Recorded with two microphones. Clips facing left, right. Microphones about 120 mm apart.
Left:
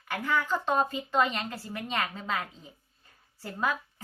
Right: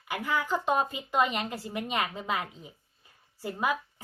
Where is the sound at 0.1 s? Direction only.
10° right (ahead or behind).